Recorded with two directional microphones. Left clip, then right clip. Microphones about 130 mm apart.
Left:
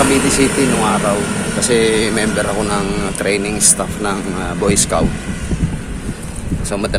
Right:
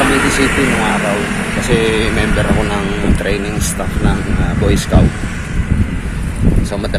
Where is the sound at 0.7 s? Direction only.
25° left (ahead or behind).